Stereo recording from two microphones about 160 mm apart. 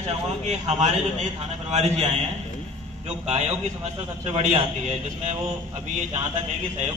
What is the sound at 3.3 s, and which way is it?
A man's voice, 45° right (ahead or behind).